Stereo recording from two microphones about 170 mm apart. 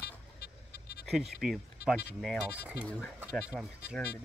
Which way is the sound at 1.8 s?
65° left (ahead or behind).